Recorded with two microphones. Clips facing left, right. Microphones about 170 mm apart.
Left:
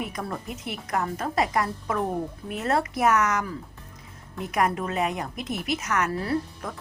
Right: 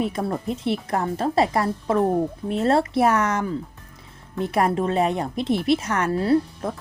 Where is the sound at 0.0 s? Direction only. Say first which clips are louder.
Right 7 dB; 30° right (ahead or behind).